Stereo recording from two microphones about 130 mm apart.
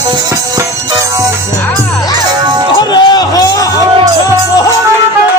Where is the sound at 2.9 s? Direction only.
30° left (ahead or behind).